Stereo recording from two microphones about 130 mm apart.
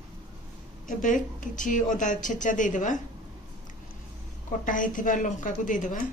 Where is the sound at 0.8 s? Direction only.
90° left.